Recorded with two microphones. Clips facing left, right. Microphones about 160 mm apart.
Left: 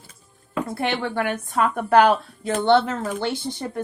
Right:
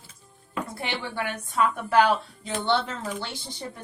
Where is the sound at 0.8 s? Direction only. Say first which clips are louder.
Left 9 dB; 55° left (ahead or behind).